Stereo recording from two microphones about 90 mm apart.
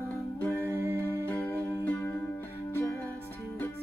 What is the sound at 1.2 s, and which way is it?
Music, 20° left (ahead or behind).